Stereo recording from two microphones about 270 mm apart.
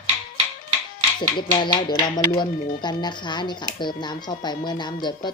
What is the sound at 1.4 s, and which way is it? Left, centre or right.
Speech, centre.